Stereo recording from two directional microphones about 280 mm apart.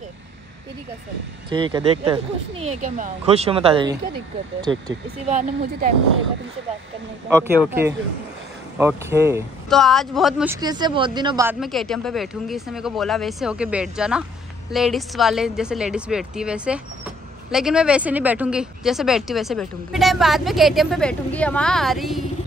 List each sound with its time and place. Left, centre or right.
1.5 s speech: centre
7.2 s speech: centre
8.7 s speech: centre
9.7 s speech: centre
11.6 s speech: centre